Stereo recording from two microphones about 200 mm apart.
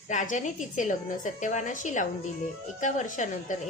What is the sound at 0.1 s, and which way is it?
A woman's voice, 40° left (ahead or behind).